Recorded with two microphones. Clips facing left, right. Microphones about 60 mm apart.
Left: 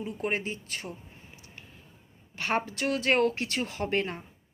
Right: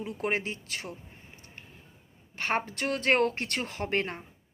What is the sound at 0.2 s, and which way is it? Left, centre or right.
Speech, right.